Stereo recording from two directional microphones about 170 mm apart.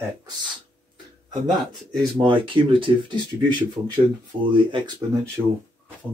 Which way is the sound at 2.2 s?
30° right (ahead or behind).